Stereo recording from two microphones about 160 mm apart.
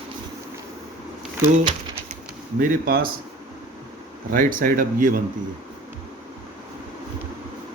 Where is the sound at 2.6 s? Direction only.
65° right (ahead or behind).